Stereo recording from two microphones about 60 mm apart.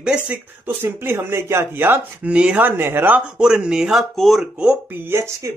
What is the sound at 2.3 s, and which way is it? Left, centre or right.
Speech, centre.